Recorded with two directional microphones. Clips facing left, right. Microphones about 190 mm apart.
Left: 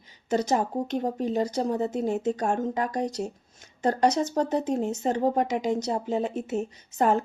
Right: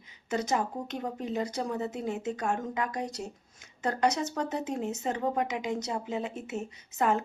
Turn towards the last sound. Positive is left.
turn(degrees=35)  # may be behind; listen again after turning